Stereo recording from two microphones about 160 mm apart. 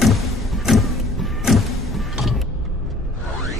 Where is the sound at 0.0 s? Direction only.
Centre (ahead or behind).